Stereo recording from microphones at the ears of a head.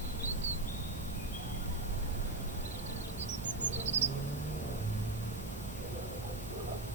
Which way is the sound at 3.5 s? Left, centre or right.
Right.